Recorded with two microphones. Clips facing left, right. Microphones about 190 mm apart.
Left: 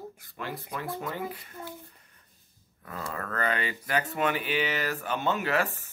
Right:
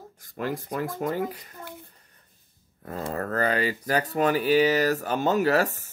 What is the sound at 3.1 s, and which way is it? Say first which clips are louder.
Speech: right 5 dB; 35° right (ahead or behind).